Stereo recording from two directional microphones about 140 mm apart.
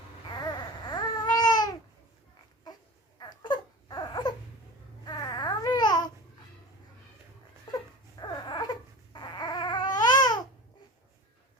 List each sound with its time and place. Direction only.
0.9 s babbling: 30° left (ahead or behind)
3.2 s crying: 30° left (ahead or behind)
5.0 s babbling: 30° left (ahead or behind)
7.7 s baby cry: 30° left (ahead or behind)
9.1 s babbling: 30° left (ahead or behind)